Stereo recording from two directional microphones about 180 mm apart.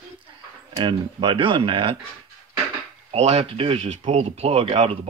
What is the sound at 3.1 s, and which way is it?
Speech, 35° right (ahead or behind).